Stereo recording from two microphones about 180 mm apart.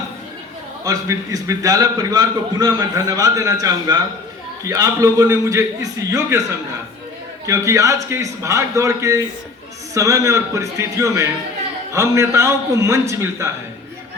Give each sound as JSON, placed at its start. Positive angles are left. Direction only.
{"t": 0.9, "sound": "a man's voice", "side_deg": -20}
{"t": 7.4, "sound": "a man's voice", "side_deg": -15}